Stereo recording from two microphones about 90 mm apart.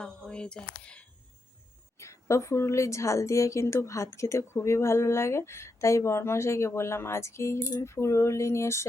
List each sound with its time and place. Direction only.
0.0 s speech: 10° left (ahead or behind)
2.0 s a woman's voice: 35° left (ahead or behind)